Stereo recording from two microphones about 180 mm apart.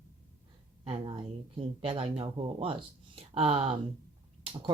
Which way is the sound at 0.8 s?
30° right (ahead or behind).